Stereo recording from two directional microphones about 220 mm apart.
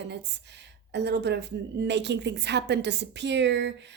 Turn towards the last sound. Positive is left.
turn(degrees=-50)  # may be behind; listen again after turning